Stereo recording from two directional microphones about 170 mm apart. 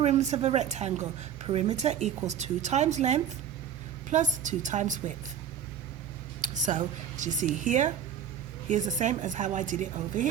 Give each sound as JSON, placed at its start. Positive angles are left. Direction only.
{"t": 0.0, "sound": "a woman's voice", "side_deg": -40}
{"t": 6.4, "sound": "speech", "side_deg": -45}